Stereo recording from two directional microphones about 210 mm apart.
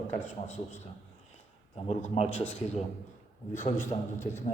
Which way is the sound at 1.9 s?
30° left (ahead or behind).